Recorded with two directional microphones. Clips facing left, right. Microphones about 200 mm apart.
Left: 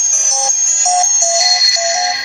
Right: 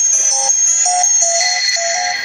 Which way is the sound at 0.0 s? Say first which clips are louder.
Left 2 dB; 35° left (ahead or behind).